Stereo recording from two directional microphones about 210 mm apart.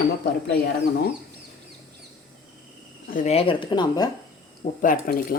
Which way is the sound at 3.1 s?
35° left (ahead or behind).